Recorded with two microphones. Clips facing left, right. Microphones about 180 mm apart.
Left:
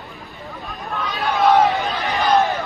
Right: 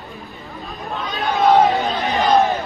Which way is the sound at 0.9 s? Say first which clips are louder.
Even; 20° right (ahead or behind).